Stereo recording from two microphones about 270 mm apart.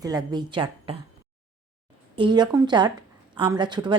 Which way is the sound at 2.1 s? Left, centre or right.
Centre.